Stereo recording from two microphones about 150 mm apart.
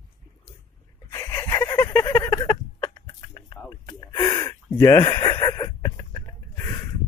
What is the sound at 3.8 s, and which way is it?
Gasp, 25° left (ahead or behind).